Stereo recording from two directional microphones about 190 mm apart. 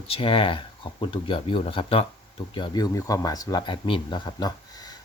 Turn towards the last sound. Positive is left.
turn(degrees=20)  # may be behind; listen again after turning